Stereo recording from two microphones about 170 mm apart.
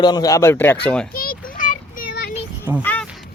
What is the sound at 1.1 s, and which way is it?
Child singing, 55° left (ahead or behind).